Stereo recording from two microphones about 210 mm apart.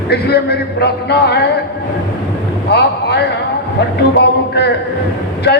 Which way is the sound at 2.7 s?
50° left (ahead or behind).